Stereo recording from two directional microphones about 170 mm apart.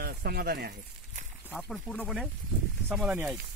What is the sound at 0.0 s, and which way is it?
Speech, 60° right (ahead or behind).